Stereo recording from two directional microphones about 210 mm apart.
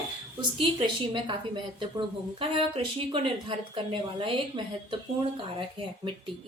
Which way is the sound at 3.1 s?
25° right (ahead or behind).